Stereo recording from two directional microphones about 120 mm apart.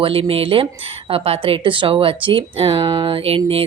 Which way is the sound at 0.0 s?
50° right (ahead or behind).